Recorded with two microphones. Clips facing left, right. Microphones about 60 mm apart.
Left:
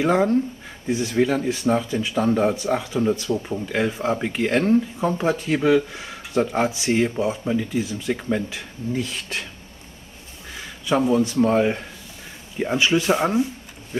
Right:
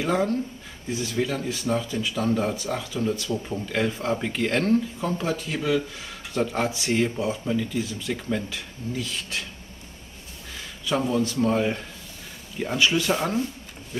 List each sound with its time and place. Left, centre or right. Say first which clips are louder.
0.0 s speech: left 5 dB; centre
3.3 s speech: left 3 dB; centre
10.5 s a sound: left 5 dB; centre
11.4 s speech: left 4 dB; centre